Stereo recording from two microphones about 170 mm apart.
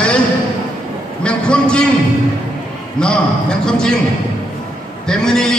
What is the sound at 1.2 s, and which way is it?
Speech, 5° left (ahead or behind).